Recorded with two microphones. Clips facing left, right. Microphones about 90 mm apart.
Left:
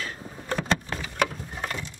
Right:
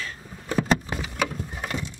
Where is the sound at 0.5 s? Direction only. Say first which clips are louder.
Right 3 dB; 15° right (ahead or behind).